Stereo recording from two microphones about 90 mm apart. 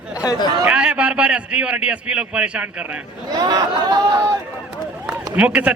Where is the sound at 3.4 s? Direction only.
50° right (ahead or behind).